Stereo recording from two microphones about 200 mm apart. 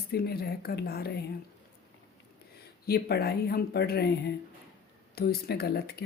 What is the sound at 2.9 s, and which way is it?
Speech, 55° left (ahead or behind).